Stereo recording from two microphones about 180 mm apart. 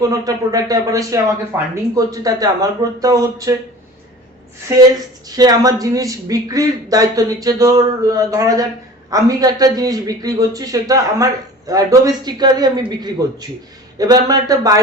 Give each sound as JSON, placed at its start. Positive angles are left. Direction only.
{"t": 0.1, "sound": "a man's voice", "side_deg": -20}
{"t": 5.4, "sound": "a man's voice", "side_deg": -20}